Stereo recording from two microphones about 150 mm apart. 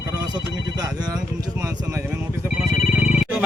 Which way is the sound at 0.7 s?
25° right (ahead or behind).